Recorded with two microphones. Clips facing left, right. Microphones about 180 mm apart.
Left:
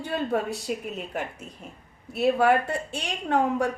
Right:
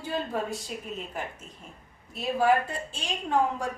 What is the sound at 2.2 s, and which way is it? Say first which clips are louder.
A woman's voice: left 3 dB; 65° left (ahead or behind).